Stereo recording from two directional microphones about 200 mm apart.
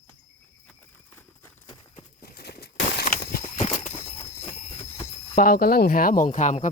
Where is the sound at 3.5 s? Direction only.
30° left (ahead or behind).